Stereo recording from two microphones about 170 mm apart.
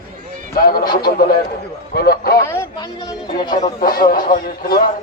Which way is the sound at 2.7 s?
25° left (ahead or behind).